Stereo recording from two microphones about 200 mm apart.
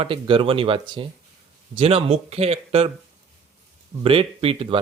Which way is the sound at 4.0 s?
25° right (ahead or behind).